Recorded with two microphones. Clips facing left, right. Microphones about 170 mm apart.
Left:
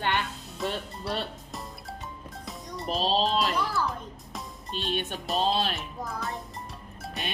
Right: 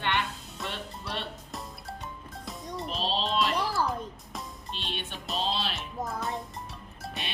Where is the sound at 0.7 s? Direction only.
40° left (ahead or behind).